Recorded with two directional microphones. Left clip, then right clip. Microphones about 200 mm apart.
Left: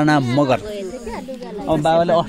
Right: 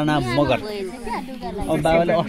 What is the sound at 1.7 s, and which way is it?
Speech, 40° left (ahead or behind).